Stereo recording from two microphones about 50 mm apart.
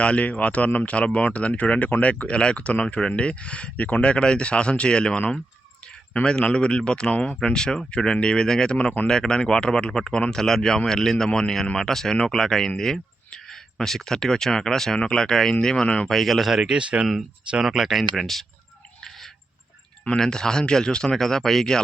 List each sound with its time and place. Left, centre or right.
0.0 s speech: left
6.2 s speech: centre
16.0 s speech: centre
16.7 s speech: right
17.6 s speech: centre
20.1 s speech: centre